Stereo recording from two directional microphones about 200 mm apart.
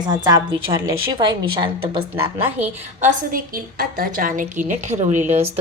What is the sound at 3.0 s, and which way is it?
A woman's voice, 40° right (ahead or behind).